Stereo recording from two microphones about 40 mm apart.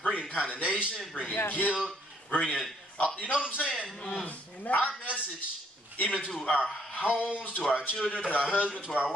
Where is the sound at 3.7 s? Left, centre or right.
Left.